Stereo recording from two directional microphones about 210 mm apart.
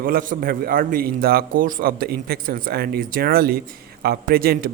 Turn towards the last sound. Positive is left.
turn(degrees=-45)  # may be behind; listen again after turning